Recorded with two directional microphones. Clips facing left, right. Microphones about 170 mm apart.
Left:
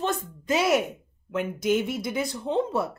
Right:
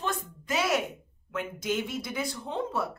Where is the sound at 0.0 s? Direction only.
20° left (ahead or behind).